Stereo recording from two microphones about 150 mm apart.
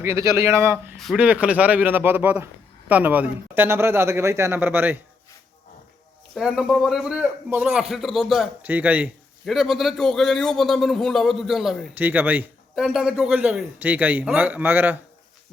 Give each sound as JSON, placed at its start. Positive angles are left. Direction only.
{"t": 0.0, "sound": "a man's voice", "side_deg": -20}
{"t": 0.9, "sound": "a man's voice", "side_deg": 0}
{"t": 1.2, "sound": "a man's voice", "side_deg": -10}
{"t": 6.3, "sound": "a man's voice", "side_deg": 0}
{"t": 8.6, "sound": "a man's voice", "side_deg": -10}
{"t": 11.9, "sound": "a man's voice", "side_deg": -10}